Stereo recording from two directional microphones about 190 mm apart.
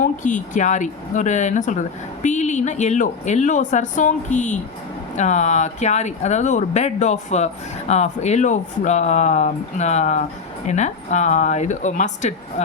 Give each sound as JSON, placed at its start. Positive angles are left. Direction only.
{"t": 0.0, "sound": "speech", "side_deg": 45}